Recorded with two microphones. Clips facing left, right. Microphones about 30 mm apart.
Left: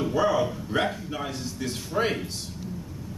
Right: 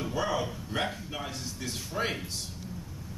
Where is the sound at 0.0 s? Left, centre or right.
Centre.